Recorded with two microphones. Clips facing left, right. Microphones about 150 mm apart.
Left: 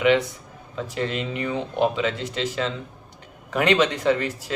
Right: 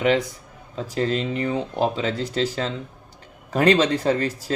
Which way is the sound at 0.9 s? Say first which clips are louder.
Right 4 dB; 35° right (ahead or behind).